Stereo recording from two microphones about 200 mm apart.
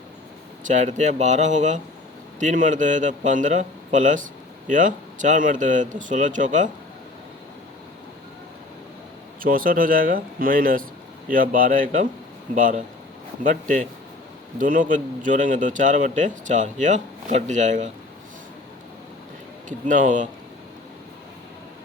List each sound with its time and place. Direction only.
0.6 s a man's voice: 40° right (ahead or behind)
9.4 s a man's voice: 45° right (ahead or behind)
19.6 s a man's voice: 40° right (ahead or behind)